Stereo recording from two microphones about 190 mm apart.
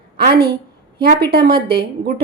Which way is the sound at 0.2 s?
55° right (ahead or behind).